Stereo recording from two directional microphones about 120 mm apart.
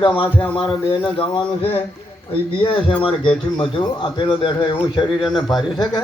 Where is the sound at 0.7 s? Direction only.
45° left (ahead or behind).